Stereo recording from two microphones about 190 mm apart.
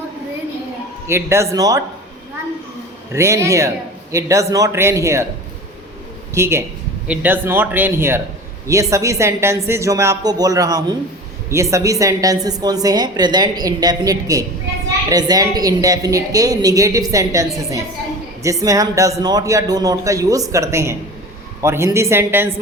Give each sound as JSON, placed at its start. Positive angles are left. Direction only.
{"t": 1.0, "sound": "a man's voice", "side_deg": -15}
{"t": 3.1, "sound": "a man's voice", "side_deg": -15}
{"t": 6.3, "sound": "a man's voice", "side_deg": -15}